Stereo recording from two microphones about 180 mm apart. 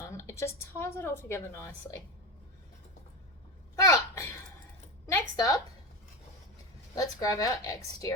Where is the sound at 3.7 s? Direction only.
15° left (ahead or behind).